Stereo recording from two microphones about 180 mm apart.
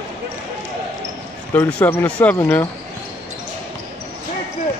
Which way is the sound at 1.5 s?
10° left (ahead or behind).